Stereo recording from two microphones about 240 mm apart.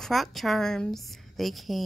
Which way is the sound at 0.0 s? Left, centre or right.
Centre.